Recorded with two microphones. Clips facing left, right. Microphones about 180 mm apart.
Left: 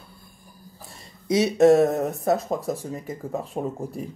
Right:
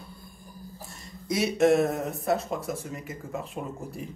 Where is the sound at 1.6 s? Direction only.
40° left (ahead or behind).